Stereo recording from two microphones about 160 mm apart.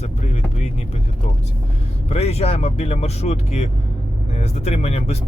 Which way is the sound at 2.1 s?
40° left (ahead or behind).